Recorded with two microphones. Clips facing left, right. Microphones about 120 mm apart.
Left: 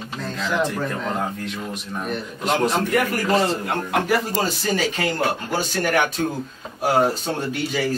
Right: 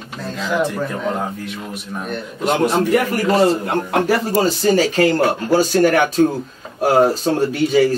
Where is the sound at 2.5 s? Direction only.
30° right (ahead or behind).